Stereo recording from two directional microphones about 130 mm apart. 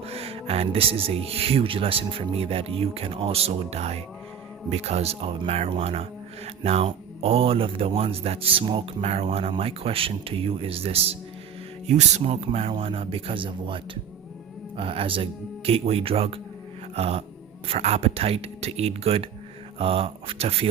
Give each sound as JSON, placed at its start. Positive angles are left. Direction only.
{"t": 0.0, "sound": "speech", "side_deg": -50}
{"t": 9.0, "sound": "speech", "side_deg": -55}
{"t": 11.9, "sound": "speech", "side_deg": -60}